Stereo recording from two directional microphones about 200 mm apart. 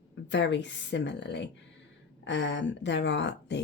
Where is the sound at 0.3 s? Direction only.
60° left (ahead or behind).